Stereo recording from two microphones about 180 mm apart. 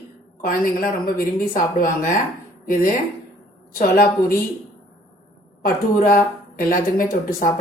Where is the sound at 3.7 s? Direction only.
50° left (ahead or behind).